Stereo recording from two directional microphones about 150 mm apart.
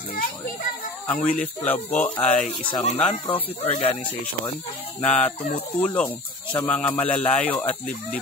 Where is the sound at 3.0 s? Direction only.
40° left (ahead or behind).